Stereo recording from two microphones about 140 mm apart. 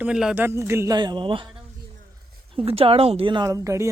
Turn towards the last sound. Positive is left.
turn(degrees=-20)  # may be behind; listen again after turning